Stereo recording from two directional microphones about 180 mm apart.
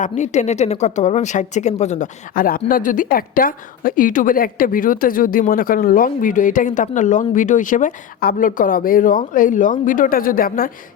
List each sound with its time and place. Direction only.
0.0 s a woman's voice: 40° left (ahead or behind)